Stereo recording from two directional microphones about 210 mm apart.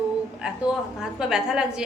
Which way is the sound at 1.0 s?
Centre (ahead or behind).